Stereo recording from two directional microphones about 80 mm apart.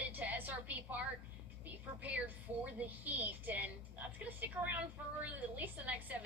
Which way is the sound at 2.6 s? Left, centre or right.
Right.